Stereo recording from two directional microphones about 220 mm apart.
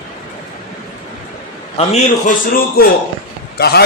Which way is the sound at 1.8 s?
30° left (ahead or behind).